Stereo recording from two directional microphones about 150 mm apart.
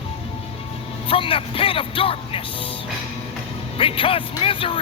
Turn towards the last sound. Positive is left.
turn(degrees=35)  # may be behind; listen again after turning